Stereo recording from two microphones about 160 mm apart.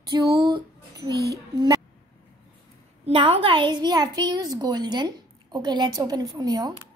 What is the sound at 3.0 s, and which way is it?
A woman's voice, 35° right (ahead or behind).